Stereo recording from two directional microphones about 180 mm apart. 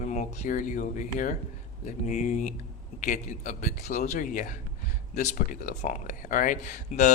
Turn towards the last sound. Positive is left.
turn(degrees=45)  # may be behind; listen again after turning